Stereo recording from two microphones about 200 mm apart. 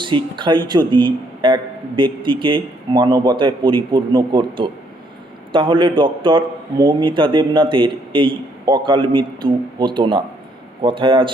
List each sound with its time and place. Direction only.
0.0 s a man's voice: 25° right (ahead or behind)